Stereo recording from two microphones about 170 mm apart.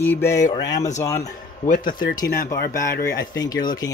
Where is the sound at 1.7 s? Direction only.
55° left (ahead or behind).